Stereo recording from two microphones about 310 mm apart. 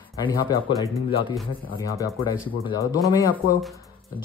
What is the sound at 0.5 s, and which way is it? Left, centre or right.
Speech, centre.